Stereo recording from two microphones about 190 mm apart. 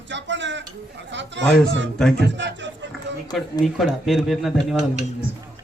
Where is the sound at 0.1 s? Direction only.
70° right (ahead or behind).